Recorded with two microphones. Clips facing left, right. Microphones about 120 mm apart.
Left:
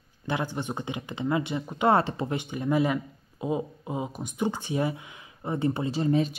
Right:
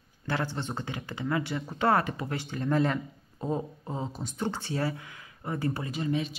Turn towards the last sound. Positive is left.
turn(degrees=35)  # may be behind; listen again after turning